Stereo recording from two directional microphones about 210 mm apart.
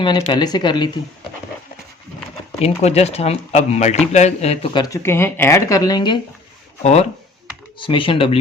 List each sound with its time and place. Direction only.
0.0 s speech: 20° left (ahead or behind)
2.6 s speech: 30° left (ahead or behind)
7.8 s speech: 25° left (ahead or behind)